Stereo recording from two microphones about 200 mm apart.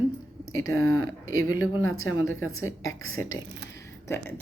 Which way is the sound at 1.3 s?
90° left.